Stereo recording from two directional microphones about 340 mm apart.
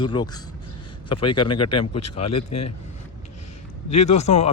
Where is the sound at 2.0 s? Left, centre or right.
Left.